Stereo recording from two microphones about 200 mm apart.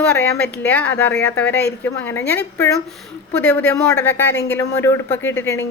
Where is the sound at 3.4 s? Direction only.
5° left (ahead or behind).